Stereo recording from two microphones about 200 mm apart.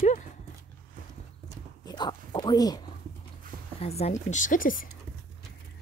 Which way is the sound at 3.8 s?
30° left (ahead or behind).